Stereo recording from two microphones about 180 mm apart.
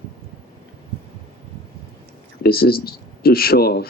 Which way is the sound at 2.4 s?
60° left (ahead or behind).